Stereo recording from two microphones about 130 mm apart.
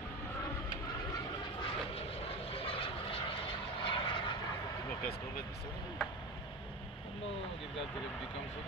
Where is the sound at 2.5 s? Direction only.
45° left (ahead or behind).